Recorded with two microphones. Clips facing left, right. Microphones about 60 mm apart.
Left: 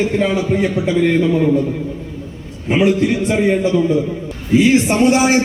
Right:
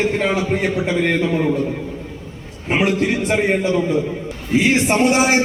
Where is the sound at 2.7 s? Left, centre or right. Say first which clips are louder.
Left 3 dB; right.